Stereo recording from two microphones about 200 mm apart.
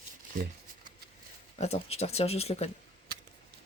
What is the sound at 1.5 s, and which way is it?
Speech, 30° left (ahead or behind).